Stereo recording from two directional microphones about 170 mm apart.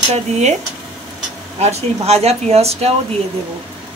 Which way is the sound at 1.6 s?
40° right (ahead or behind).